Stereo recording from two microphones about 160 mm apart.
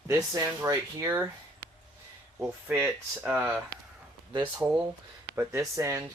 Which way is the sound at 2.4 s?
10° right (ahead or behind).